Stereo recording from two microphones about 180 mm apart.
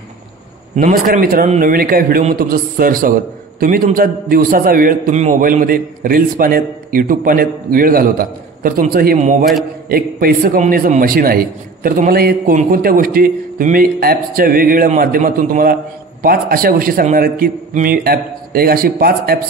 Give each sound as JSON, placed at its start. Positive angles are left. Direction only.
{"t": 0.7, "sound": "a man's voice", "side_deg": -45}